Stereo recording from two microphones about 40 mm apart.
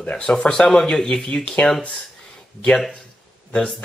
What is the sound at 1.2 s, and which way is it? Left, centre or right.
Speech, left.